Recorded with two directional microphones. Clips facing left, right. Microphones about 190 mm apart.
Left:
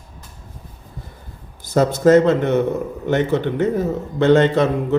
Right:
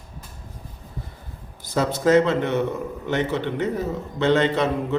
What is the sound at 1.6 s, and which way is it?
A man's voice, 45° left (ahead or behind).